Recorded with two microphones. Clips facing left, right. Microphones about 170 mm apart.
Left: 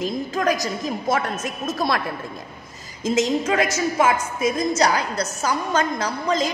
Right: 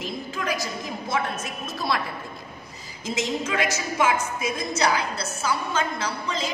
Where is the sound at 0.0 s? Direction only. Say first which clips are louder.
Left 8 dB; 45° left (ahead or behind).